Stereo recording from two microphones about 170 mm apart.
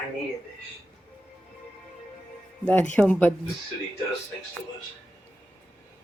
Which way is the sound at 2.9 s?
10° left (ahead or behind).